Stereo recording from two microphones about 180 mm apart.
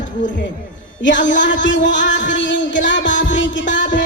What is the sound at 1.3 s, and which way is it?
Music, 90° left.